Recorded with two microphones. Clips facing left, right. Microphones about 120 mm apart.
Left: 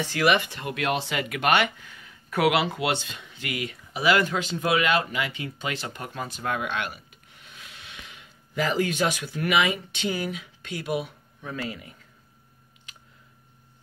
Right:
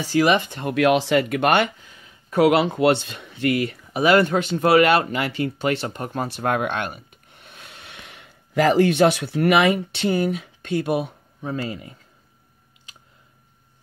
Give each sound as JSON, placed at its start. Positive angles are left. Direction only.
{"t": 0.0, "sound": "speech", "side_deg": -35}
{"t": 0.5, "sound": "speech", "side_deg": -45}
{"t": 0.8, "sound": "speech", "side_deg": -70}
{"t": 1.1, "sound": "speech", "side_deg": -50}
{"t": 1.9, "sound": "a sound", "side_deg": -25}
{"t": 2.5, "sound": "speech", "side_deg": -45}
{"t": 5.9, "sound": "speech", "side_deg": -40}
{"t": 6.2, "sound": "speech", "side_deg": -60}
{"t": 11.4, "sound": "speech", "side_deg": -35}